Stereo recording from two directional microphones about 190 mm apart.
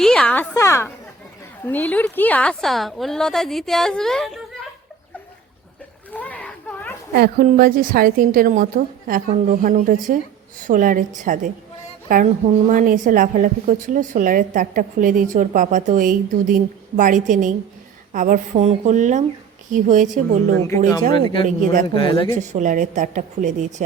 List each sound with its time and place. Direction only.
0.0 s a sound: 5° left (ahead or behind)
0.5 s a woman's voice: 15° left (ahead or behind)
6.1 s a sound: 5° left (ahead or behind)
7.4 s a woman's voice: 45° right (ahead or behind)
21.4 s a woman's voice: 45° right (ahead or behind)
21.9 s speech: 25° left (ahead or behind)
22.4 s a woman's voice: 40° right (ahead or behind)